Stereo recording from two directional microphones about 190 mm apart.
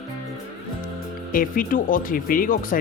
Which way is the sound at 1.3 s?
45° left (ahead or behind).